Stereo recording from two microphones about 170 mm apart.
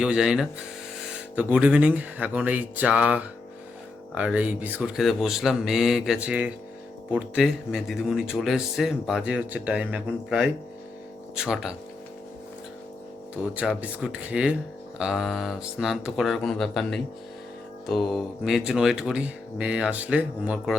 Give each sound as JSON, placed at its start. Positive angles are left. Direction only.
{"t": 0.0, "sound": "speech", "side_deg": -5}
{"t": 13.6, "sound": "speech", "side_deg": -5}